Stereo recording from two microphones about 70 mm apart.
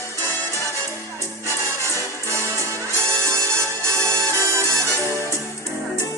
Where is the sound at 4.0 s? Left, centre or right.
Right.